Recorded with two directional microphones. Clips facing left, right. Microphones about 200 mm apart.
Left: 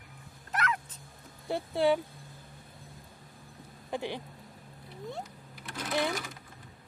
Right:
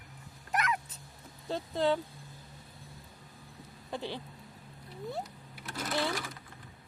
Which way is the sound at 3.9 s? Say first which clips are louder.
Left 3 dB; 15° left (ahead or behind).